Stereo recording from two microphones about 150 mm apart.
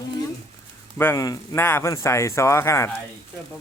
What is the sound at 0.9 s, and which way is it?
Speech, 20° left (ahead or behind).